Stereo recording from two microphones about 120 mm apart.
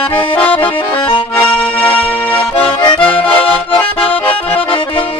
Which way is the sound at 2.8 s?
45° left (ahead or behind).